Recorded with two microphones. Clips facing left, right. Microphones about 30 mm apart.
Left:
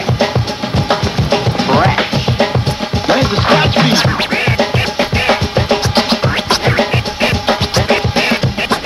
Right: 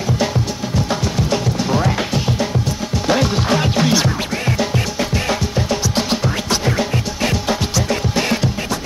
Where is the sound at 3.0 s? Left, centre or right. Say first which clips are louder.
Left 5 dB; left.